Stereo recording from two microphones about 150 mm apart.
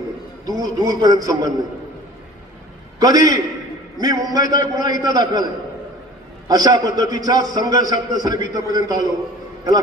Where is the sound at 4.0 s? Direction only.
25° right (ahead or behind).